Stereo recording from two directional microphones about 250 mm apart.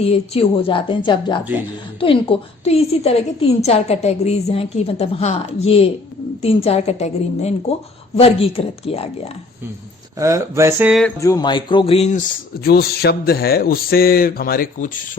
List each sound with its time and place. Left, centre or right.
0.0 s a woman's voice: left
10.2 s speech: centre
11.2 s a woman's voice: centre
12.6 s speech: left